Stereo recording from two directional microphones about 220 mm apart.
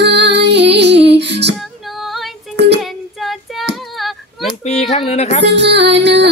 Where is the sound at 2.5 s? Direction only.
50° right (ahead or behind).